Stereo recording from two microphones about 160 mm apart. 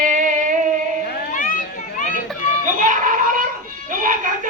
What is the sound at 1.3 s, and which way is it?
Children playing, 55° left (ahead or behind).